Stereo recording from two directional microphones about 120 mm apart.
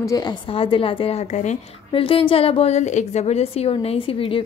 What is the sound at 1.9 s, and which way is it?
A woman's voice, 50° left (ahead or behind).